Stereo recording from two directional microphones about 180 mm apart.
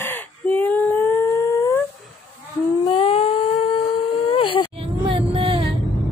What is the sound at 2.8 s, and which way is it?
Humming, 30° left (ahead or behind).